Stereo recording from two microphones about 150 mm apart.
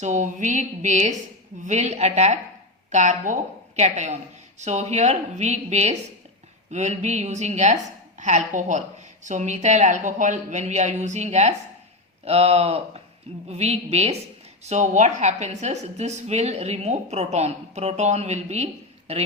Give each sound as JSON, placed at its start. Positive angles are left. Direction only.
{"t": 0.0, "sound": "a woman's voice", "side_deg": -55}